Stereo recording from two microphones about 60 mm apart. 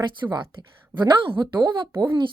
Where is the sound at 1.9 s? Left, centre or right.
Right.